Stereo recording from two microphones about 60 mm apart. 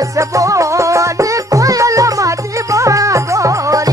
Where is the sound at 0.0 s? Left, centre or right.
Right.